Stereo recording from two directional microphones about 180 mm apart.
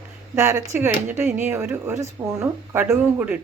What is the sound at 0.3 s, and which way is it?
Speech, 15° right (ahead or behind).